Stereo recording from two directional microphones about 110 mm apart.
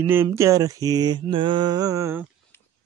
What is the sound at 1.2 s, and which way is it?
Mantra, 45° right (ahead or behind).